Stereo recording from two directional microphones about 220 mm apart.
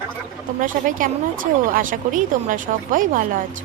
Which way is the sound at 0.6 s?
35° right (ahead or behind).